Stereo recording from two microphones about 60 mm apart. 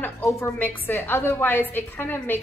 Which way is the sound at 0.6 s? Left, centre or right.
Left.